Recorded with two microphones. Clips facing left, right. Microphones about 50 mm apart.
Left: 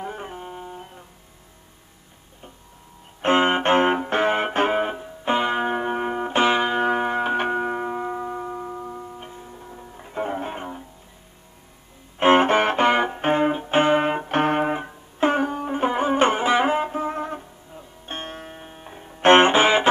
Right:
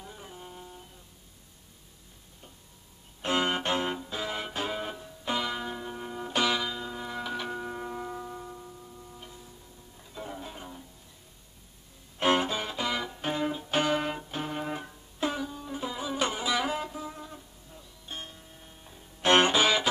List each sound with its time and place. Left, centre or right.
0.0 s music: left
3.2 s music: left
6.7 s music: left
9.1 s music: left
12.2 s music: left
12.4 s music: left
14.7 s music: left